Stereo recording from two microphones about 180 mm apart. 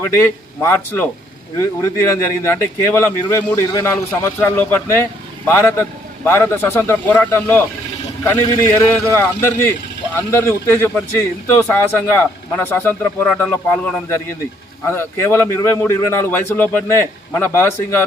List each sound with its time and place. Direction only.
0.0 s speech: 15° left (ahead or behind)
14.8 s speech: 15° left (ahead or behind)